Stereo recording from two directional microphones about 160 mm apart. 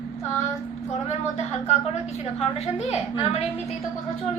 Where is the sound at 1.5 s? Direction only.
45° left (ahead or behind).